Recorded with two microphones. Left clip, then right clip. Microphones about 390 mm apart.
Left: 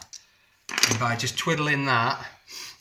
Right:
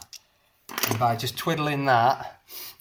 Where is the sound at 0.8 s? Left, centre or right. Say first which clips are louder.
Even; centre.